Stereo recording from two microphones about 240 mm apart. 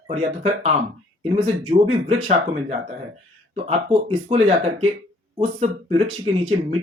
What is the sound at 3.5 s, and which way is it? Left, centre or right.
Speech, right.